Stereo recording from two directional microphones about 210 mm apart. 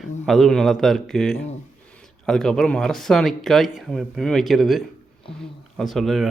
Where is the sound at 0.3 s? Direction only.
Centre (ahead or behind).